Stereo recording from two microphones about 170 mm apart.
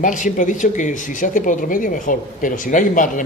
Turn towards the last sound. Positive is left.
turn(degrees=50)  # may be behind; listen again after turning